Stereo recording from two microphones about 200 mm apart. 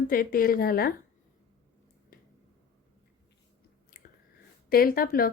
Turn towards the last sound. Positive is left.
turn(degrees=45)  # may be behind; listen again after turning